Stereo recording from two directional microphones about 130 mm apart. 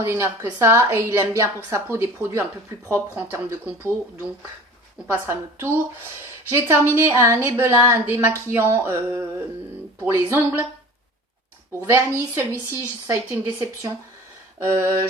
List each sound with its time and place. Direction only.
0.0 s a woman's voice: 20° right (ahead or behind)
5.0 s a woman's voice: 20° right (ahead or behind)
11.9 s a woman's voice: 20° right (ahead or behind)